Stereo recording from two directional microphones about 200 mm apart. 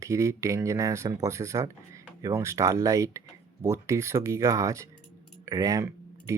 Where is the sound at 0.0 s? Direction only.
15° right (ahead or behind).